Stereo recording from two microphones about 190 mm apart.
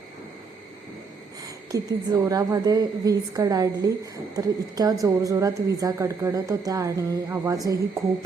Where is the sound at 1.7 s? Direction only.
20° right (ahead or behind).